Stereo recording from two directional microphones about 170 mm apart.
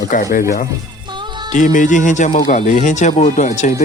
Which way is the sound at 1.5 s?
50° left (ahead or behind).